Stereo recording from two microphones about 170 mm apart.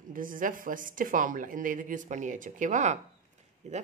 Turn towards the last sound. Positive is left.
turn(degrees=-45)  # may be behind; listen again after turning